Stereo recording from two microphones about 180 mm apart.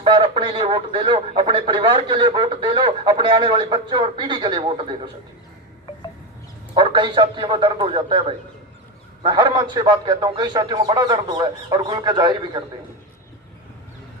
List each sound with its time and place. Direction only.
0.0 s speech: 30° right (ahead or behind)
6.7 s speech: 25° right (ahead or behind)